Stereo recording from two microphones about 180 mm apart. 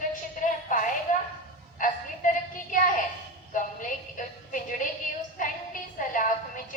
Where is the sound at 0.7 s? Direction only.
45° left (ahead or behind).